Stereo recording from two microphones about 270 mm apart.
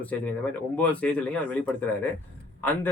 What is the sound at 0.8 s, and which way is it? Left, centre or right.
Speech, centre.